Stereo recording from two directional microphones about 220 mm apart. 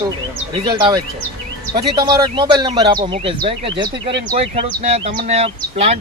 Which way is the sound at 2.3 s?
20° right (ahead or behind).